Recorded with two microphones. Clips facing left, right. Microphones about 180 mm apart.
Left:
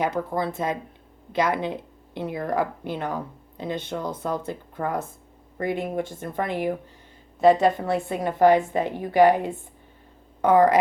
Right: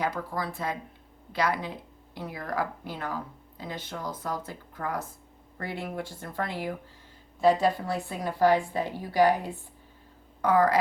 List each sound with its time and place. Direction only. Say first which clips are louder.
0.0 s speech: left 6 dB; 20° left (ahead or behind)
9.0 s a woman's voice: left 5 dB; 55° left (ahead or behind)
10.4 s speech: left 5 dB; 25° left (ahead or behind)